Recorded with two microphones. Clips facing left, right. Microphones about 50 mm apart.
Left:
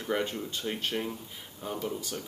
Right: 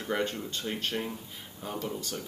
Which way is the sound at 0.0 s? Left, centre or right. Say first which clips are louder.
Even; centre.